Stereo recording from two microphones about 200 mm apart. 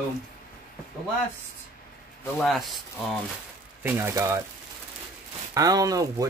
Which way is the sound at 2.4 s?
Centre (ahead or behind).